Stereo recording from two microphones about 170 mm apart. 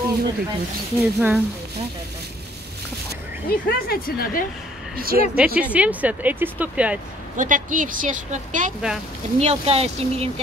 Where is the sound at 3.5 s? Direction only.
65° left (ahead or behind).